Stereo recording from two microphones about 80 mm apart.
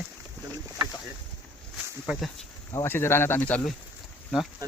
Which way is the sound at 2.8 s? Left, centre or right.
Left.